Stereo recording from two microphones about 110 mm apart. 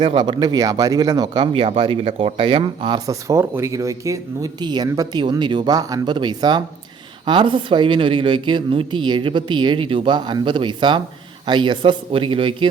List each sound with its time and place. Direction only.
0.0 s speech: 50° right (ahead or behind)
1.6 s speech: 55° right (ahead or behind)
3.1 s speech: 25° right (ahead or behind)
4.6 s speech: 40° right (ahead or behind)